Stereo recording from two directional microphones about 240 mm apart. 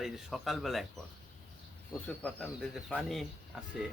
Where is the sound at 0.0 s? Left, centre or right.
Centre.